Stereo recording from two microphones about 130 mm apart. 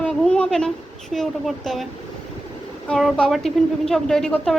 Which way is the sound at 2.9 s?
5° left (ahead or behind).